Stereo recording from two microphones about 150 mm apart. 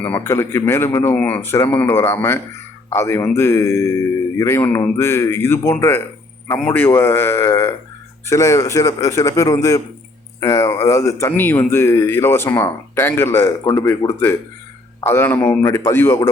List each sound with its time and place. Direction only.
0.0 s a man's voice: 15° left (ahead or behind)